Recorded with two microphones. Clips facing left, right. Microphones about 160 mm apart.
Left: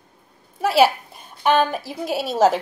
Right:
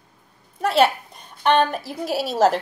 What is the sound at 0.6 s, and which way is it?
A woman's voice, 5° left (ahead or behind).